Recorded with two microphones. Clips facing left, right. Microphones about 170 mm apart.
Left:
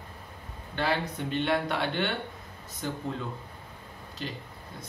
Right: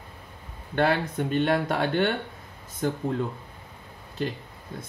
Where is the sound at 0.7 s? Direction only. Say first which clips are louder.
Right 6 dB; 50° right (ahead or behind).